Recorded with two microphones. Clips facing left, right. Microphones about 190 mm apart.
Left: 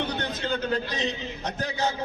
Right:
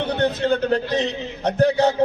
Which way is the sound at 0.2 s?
60° right (ahead or behind).